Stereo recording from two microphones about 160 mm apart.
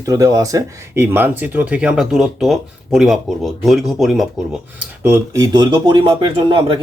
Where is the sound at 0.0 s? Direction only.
20° right (ahead or behind); by 4.3 s centre (ahead or behind).